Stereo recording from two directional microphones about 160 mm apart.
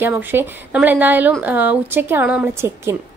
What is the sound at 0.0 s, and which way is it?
A woman's voice, 10° right (ahead or behind).